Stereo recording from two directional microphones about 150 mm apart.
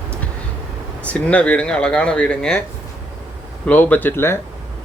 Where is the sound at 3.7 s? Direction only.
10° left (ahead or behind).